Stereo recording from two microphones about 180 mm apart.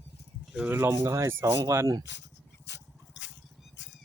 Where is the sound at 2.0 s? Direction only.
80° left.